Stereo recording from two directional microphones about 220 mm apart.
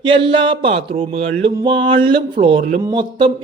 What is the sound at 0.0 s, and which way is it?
Speech, 25° right (ahead or behind).